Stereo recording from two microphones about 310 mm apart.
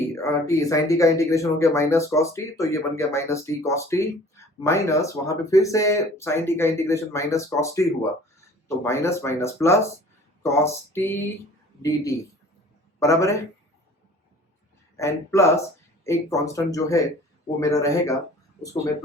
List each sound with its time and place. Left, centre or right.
0.0 s speech: centre
14.9 s speech: centre